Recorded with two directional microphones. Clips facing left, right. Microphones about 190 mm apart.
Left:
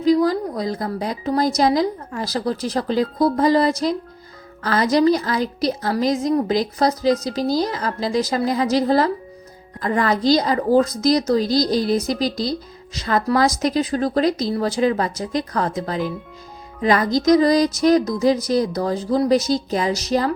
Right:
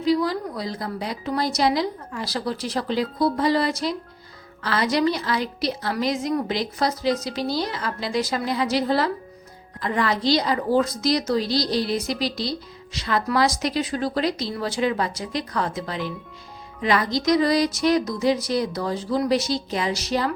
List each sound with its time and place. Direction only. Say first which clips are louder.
0.0 s a woman's voice: left 5 dB; 45° left (ahead or behind)